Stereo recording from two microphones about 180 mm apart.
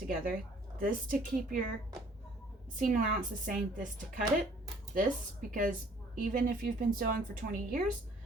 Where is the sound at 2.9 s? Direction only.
50° right (ahead or behind).